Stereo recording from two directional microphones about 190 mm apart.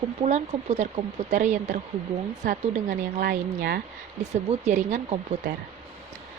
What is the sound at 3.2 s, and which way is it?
Speech, 50° right (ahead or behind).